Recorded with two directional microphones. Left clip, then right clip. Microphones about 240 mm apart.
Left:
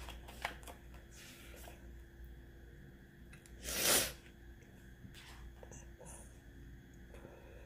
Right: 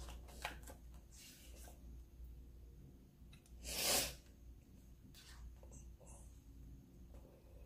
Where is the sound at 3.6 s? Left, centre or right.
Left.